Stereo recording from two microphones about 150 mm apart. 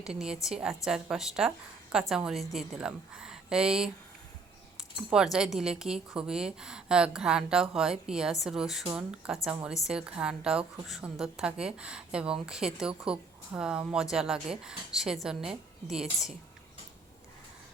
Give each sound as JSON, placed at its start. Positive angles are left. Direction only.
{"t": 0.0, "sound": "a woman's voice", "side_deg": -5}
{"t": 4.9, "sound": "a woman's voice", "side_deg": -5}